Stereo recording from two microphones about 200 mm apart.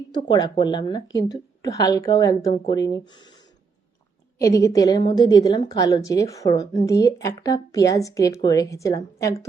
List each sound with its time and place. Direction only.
0.1 s a woman's voice: 20° left (ahead or behind)
4.4 s a woman's voice: 15° left (ahead or behind)